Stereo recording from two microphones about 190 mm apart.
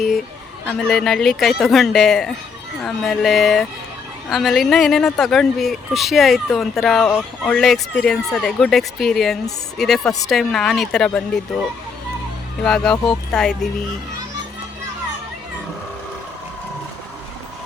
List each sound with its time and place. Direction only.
0.7 s speech: 5° left (ahead or behind)
10.0 s speech: 15° left (ahead or behind)
10.2 s speech: centre (ahead or behind)
12.6 s speech: 5° left (ahead or behind)